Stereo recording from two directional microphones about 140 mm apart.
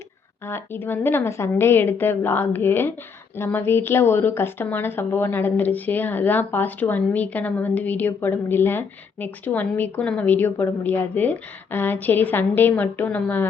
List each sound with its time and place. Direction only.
0.4 s speech: 15° left (ahead or behind)